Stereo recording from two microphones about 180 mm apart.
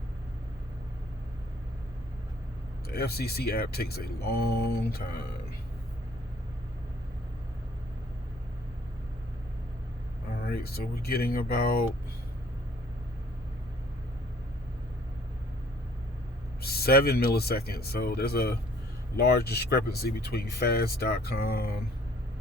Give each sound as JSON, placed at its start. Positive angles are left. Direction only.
{"t": 2.9, "sound": "speech", "side_deg": 60}
{"t": 10.3, "sound": "speech", "side_deg": 60}
{"t": 16.6, "sound": "speech", "side_deg": 60}